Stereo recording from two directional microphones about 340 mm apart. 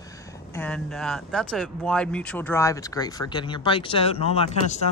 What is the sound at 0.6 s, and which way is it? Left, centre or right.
Speech, centre.